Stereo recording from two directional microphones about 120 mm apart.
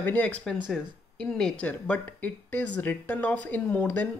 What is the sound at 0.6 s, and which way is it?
Speech, centre (ahead or behind).